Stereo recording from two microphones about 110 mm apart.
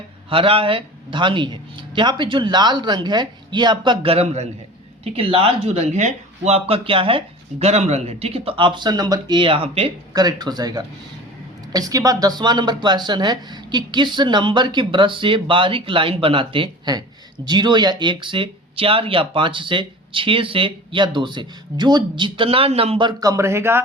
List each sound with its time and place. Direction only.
0.3 s speech: 55° right (ahead or behind)
4.1 s a man's voice: 75° right (ahead or behind)
5.0 s speech: 60° right (ahead or behind)
7.6 s speech: 80° right; by 23.0 s 65° right (ahead or behind)
23.0 s speech: 30° right (ahead or behind)